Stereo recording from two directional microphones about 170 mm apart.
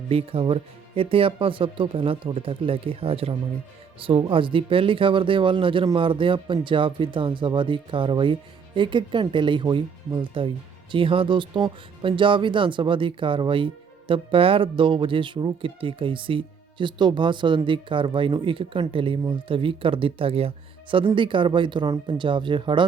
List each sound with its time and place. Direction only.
0.1 s speech: 35° right (ahead or behind)